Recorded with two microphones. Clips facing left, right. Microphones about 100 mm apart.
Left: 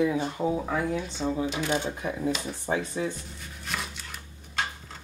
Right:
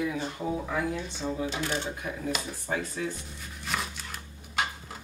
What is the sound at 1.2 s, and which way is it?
Speech, 15° left (ahead or behind).